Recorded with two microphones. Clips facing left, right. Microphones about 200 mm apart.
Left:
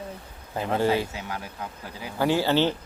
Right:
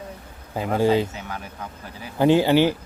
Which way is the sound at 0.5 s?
10° right (ahead or behind).